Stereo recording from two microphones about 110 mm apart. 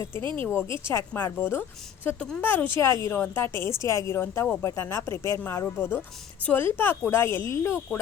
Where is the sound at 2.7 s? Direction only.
30° left (ahead or behind).